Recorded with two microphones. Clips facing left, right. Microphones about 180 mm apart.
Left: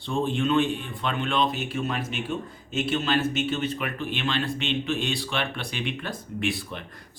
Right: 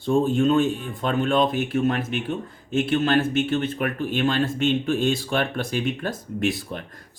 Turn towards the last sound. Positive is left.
turn(degrees=-45)  # may be behind; listen again after turning